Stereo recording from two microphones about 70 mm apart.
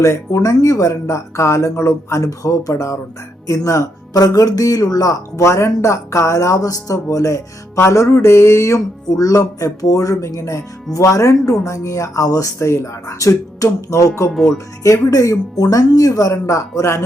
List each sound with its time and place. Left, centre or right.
0.0 s speech: left
7.8 s speech: left
8.2 s a sound: left
9.0 s speech: left
12.2 s speech: left
12.5 s speech: left
14.3 s speech: centre
14.8 s speech: left